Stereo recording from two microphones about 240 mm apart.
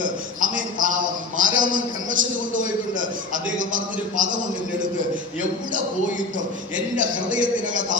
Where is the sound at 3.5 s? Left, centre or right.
Right.